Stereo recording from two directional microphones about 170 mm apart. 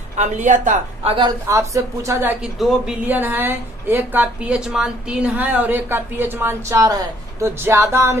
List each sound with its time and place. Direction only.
0.2 s a woman's voice: 45° right (ahead or behind)
1.5 s a woman's voice: 20° right (ahead or behind)